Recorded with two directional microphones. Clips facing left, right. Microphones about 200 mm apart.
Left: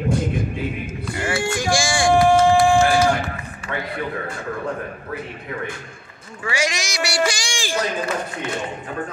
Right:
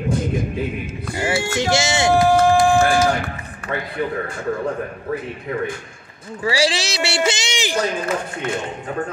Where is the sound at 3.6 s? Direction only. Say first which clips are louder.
Right 3 dB; 60° right (ahead or behind).